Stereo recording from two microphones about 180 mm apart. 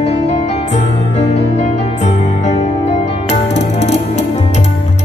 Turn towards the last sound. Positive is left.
turn(degrees=40)  # may be behind; listen again after turning